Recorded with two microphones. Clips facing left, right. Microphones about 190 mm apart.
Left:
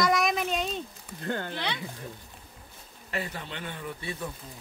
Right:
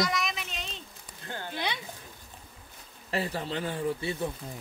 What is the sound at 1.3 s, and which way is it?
Speech, 60° left (ahead or behind).